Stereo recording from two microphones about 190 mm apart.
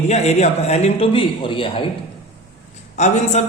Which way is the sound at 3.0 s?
35° left (ahead or behind).